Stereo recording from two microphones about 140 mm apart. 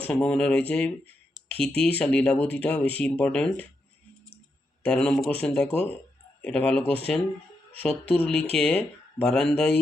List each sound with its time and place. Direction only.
0.0 s speech: 5° left (ahead or behind)
1.3 s a sound: 40° right (ahead or behind)
1.9 s speech: 10° left (ahead or behind)
4.8 s speech: 5° left (ahead or behind)